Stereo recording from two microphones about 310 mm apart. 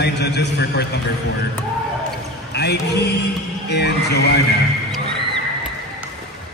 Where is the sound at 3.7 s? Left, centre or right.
Left.